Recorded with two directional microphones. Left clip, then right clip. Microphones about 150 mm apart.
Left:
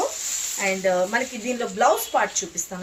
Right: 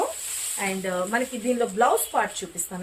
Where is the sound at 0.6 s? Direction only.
15° right (ahead or behind).